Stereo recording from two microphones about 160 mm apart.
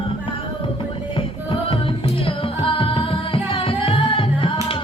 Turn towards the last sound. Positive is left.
turn(degrees=35)  # may be behind; listen again after turning